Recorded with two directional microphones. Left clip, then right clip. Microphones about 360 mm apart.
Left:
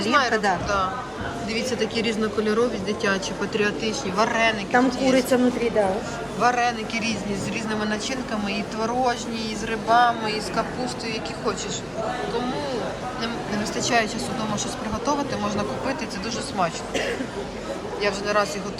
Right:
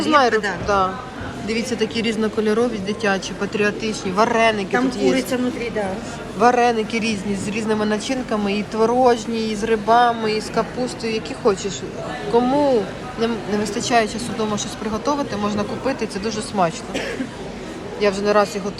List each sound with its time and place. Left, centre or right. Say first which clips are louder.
0.0 s speech: right 4 dB; centre
5.1 s speech: left 2 dB; left
6.4 s speech: right 6 dB; centre
18.0 s speech: right 6 dB; centre